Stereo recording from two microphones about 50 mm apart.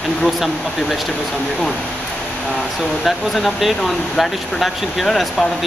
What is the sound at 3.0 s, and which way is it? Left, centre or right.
Speech, centre.